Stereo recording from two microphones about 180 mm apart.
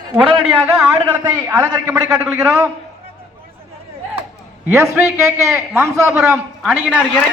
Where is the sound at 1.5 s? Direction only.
20° right (ahead or behind).